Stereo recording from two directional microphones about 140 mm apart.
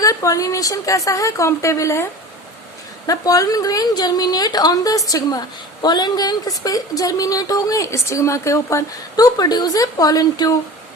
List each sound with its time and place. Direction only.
0.0 s a woman's voice: 25° left (ahead or behind)
3.1 s a woman's voice: 25° left (ahead or behind)